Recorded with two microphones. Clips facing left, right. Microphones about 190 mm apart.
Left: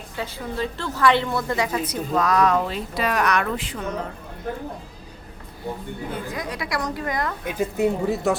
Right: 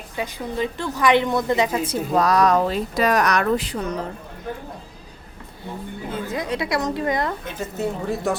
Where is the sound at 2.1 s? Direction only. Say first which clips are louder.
Right 2 dB; 35° right (ahead or behind).